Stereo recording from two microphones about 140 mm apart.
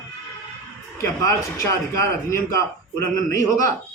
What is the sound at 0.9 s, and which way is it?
A man's voice, 20° left (ahead or behind).